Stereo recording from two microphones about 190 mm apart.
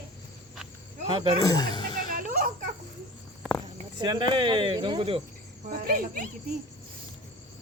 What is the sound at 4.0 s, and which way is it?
Speech, 25° right (ahead or behind).